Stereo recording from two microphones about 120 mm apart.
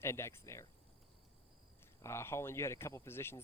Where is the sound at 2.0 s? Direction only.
20° left (ahead or behind).